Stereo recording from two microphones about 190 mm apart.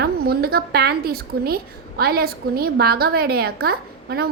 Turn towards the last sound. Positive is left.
turn(degrees=-55)  # may be behind; listen again after turning